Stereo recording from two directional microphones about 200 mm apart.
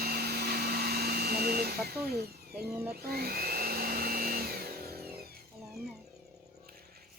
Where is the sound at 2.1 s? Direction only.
50° right (ahead or behind).